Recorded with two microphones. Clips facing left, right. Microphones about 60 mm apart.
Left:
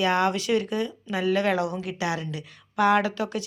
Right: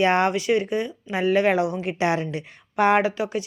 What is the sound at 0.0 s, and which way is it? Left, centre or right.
A woman's voice, right.